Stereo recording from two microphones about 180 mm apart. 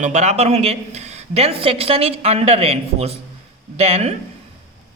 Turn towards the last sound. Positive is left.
turn(degrees=-35)  # may be behind; listen again after turning